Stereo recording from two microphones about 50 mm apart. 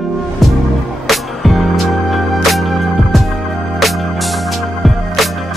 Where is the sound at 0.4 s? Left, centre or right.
Centre.